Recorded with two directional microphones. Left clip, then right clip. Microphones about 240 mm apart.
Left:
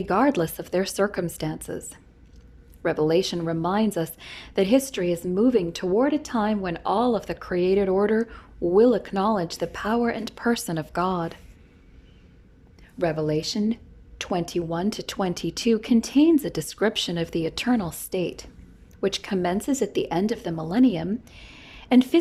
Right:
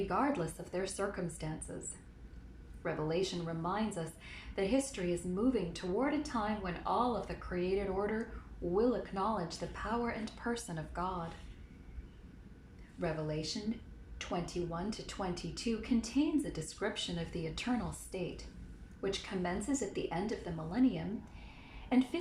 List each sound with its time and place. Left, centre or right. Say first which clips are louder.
0.1 s speech: left 17 dB; left
2.8 s speech: left 14 dB; left
13.0 s a woman's voice: left 14 dB; left